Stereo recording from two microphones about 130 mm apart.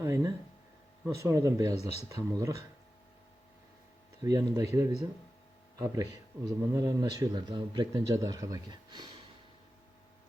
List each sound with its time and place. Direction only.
0.0 s speech: 25° right (ahead or behind)
1.8 s speech: 55° left (ahead or behind)
2.0 s speech: 25° right (ahead or behind)
4.2 s a man's voice: 30° right (ahead or behind)
8.1 s speech: 25° right (ahead or behind)